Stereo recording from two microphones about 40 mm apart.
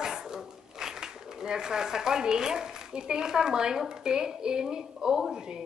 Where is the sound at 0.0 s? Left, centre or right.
Centre.